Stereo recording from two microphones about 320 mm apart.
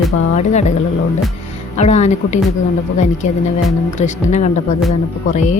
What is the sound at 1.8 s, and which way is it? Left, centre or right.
Speech, left.